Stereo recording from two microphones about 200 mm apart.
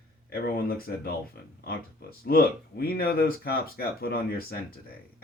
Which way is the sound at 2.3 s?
50° left (ahead or behind).